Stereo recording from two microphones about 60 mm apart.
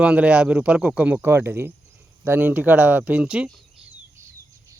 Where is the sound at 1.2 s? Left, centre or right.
Right.